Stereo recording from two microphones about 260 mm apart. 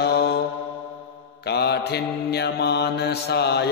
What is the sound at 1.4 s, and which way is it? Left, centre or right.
Mantra, left.